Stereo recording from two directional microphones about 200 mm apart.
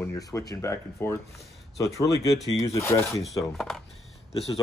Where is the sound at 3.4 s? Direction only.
Centre (ahead or behind).